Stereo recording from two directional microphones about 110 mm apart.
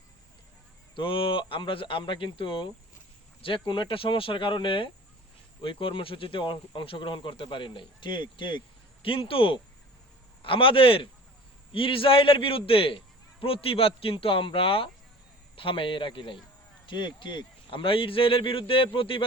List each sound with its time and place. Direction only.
0.9 s speech: 50° left (ahead or behind)